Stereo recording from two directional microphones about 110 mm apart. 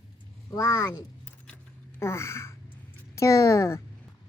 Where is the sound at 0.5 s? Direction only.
35° left (ahead or behind).